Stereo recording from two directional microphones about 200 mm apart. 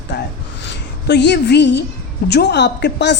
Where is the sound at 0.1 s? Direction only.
60° left (ahead or behind).